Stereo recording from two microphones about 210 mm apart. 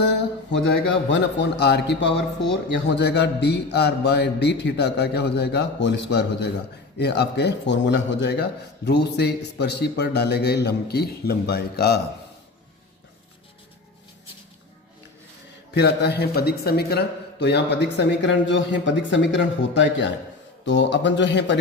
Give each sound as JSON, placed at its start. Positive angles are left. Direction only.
{"t": 0.5, "sound": "a man's voice", "side_deg": 55}
{"t": 15.7, "sound": "a man's voice", "side_deg": 55}